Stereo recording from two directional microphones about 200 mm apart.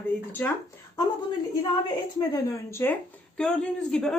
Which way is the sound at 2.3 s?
10° left (ahead or behind).